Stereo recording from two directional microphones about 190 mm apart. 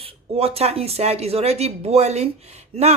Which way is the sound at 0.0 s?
30° right (ahead or behind).